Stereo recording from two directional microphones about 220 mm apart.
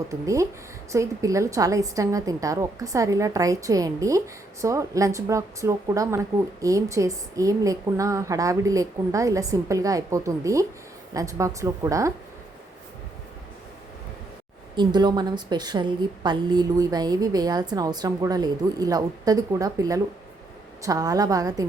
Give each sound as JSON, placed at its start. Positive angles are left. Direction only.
{"t": 0.1, "sound": "a woman's voice", "side_deg": -15}
{"t": 14.8, "sound": "a woman's voice", "side_deg": -20}